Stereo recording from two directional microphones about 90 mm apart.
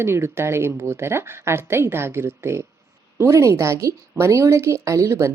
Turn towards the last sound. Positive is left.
turn(degrees=-35)  # may be behind; listen again after turning